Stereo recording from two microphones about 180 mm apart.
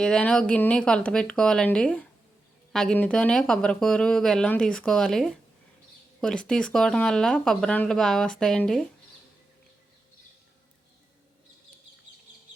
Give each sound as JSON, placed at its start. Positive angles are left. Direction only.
{"t": 0.0, "sound": "speech", "side_deg": 5}